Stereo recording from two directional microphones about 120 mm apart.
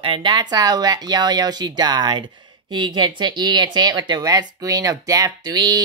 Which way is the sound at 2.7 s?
40° right (ahead or behind).